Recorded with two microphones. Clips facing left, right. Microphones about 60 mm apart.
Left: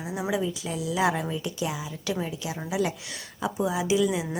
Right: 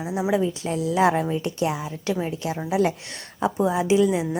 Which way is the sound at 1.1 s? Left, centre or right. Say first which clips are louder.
Right 6 dB; right.